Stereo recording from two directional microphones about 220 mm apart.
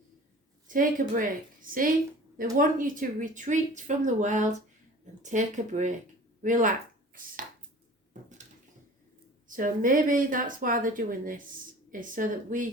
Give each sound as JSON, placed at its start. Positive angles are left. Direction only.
{"t": 0.7, "sound": "speech", "side_deg": -40}
{"t": 9.5, "sound": "speech", "side_deg": -35}